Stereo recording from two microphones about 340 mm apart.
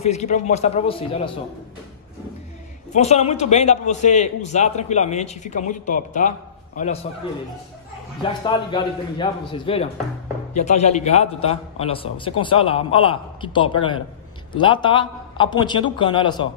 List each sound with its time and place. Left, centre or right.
0.0 s a man's voice: centre
2.9 s a man's voice: centre
8.2 s a man's voice: centre